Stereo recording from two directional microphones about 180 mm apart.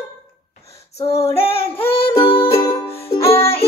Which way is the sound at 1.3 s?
30° left (ahead or behind).